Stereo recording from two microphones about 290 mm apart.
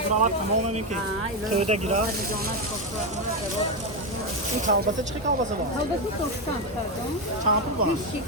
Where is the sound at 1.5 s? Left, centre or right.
Right.